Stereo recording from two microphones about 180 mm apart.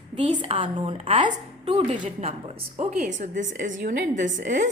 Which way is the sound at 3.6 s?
45° right (ahead or behind).